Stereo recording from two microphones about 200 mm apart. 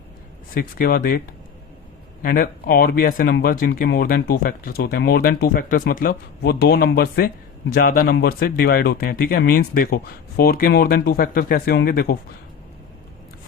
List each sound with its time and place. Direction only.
0.5 s speech: 45° left (ahead or behind)
2.2 s speech: 50° left (ahead or behind)